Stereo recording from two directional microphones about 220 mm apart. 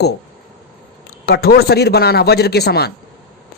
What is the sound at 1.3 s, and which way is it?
Speech, 45° left (ahead or behind).